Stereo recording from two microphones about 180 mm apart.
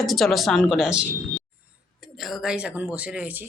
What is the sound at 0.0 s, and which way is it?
Speech, centre (ahead or behind).